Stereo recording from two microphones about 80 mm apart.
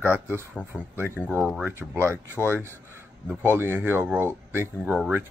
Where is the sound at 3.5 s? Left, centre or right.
Right.